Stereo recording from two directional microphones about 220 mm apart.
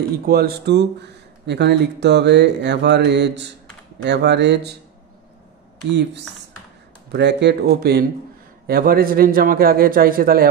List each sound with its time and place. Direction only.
0.2 s speech: 45° right (ahead or behind)
5.9 s speech: 50° right (ahead or behind)